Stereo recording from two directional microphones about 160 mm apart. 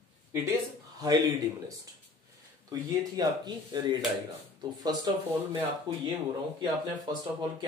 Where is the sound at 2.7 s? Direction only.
25° right (ahead or behind).